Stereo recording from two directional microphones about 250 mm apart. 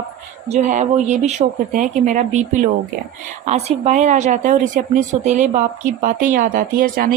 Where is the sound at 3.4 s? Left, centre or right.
Right.